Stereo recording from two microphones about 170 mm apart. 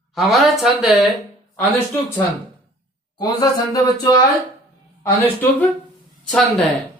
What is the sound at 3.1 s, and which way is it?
Speech, 20° left (ahead or behind).